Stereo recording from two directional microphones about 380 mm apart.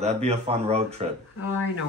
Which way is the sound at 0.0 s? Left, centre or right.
Centre.